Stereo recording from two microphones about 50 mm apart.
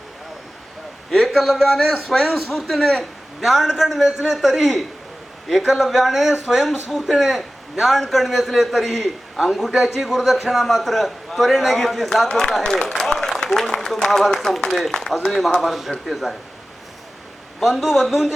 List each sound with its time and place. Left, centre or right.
1.3 s a man's voice: centre
12.3 s speech: centre
13.0 s a sound: centre
13.5 s a man's voice: centre
15.3 s a man's voice: centre
17.6 s a man's voice: centre